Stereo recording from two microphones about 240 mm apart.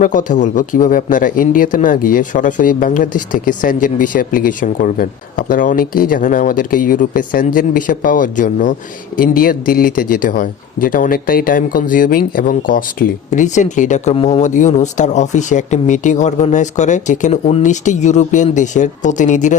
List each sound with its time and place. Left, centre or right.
0.0 s speech: left